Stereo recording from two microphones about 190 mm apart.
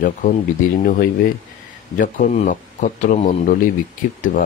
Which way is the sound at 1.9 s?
45° left (ahead or behind).